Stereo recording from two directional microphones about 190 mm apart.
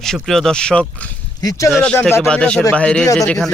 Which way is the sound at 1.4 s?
15° left (ahead or behind).